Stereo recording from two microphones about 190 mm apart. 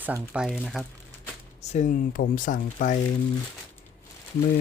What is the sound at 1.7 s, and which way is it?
Speech, 40° left (ahead or behind).